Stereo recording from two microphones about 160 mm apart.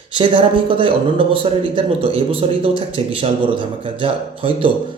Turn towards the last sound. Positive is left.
turn(degrees=-35)  # may be behind; listen again after turning